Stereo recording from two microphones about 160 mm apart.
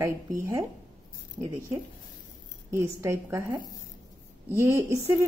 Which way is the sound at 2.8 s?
15° right (ahead or behind).